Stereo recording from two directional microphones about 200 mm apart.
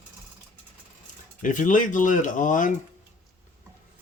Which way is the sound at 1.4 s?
40° left (ahead or behind).